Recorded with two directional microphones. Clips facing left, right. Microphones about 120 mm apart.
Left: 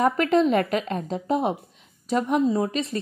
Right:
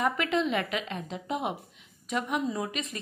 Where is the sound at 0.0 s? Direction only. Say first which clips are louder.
Left 8 dB; 40° left (ahead or behind).